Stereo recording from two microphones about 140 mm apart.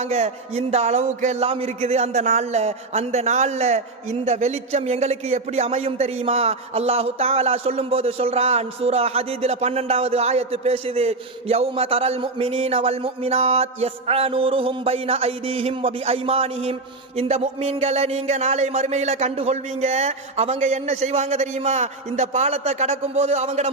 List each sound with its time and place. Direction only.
0.0 s speech: 55° right (ahead or behind)